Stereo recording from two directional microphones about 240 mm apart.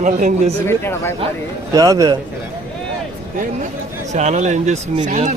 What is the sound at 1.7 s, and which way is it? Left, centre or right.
Speech, centre.